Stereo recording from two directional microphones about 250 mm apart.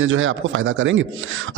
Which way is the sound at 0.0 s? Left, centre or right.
Right.